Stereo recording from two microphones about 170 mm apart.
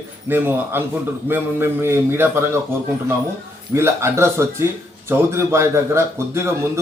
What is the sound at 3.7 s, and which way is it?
Speech, 15° right (ahead or behind).